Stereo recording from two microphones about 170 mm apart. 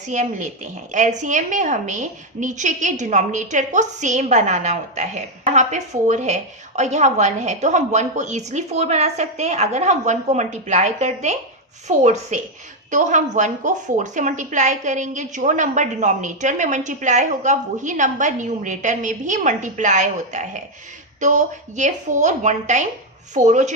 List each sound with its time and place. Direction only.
0.1 s speech: 45° right (ahead or behind)